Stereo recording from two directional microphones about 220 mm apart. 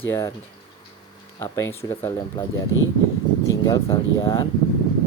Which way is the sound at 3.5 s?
15° left (ahead or behind).